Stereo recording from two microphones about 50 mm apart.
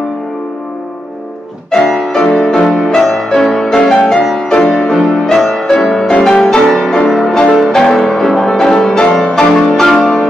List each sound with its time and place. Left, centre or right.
1.9 s music: centre